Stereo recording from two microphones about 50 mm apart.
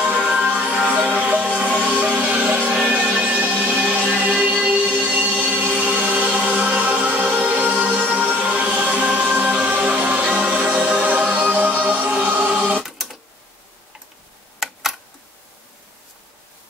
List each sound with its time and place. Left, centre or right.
0.2 s music: centre
12.8 s tick-tock: centre
14.6 s a sound: centre